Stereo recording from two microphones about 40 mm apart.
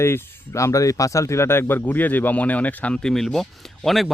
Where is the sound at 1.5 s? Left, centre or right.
Left.